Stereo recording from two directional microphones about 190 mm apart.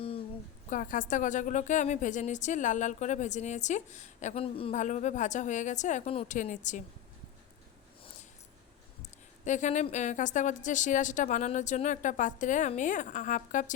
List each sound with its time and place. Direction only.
0.7 s a woman's voice: 45° left (ahead or behind)
9.4 s a woman's voice: 40° left (ahead or behind)